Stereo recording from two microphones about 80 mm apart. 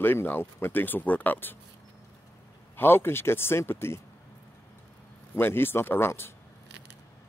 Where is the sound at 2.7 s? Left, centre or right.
Left.